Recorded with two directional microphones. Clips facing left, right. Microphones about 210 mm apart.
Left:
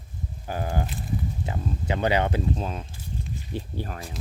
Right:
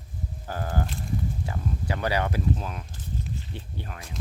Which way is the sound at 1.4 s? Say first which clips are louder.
Left 2 dB; 20° left (ahead or behind).